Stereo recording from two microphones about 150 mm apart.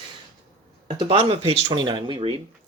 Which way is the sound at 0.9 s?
40° right (ahead or behind).